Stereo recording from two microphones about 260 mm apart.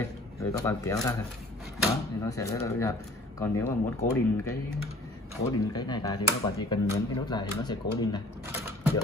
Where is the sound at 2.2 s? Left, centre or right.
Centre.